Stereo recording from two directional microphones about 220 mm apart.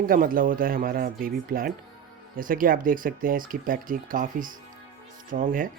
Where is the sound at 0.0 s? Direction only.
40° right (ahead or behind).